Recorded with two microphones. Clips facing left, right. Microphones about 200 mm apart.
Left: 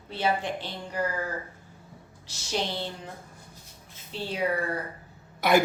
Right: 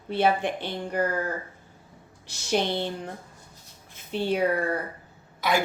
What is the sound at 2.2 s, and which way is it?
Speech, 60° right (ahead or behind).